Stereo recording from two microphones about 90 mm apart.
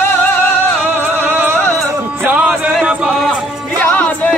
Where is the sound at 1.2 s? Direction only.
25° right (ahead or behind).